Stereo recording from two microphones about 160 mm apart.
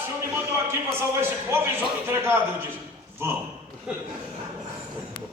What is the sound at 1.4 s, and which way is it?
Speech, 15° right (ahead or behind).